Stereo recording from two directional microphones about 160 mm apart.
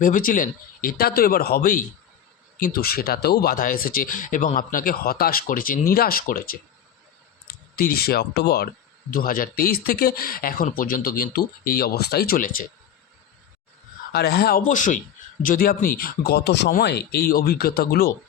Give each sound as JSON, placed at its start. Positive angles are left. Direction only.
{"t": 0.0, "sound": "speech", "side_deg": 60}
{"t": 14.1, "sound": "speech", "side_deg": 85}
{"t": 14.7, "sound": "a man's voice", "side_deg": 50}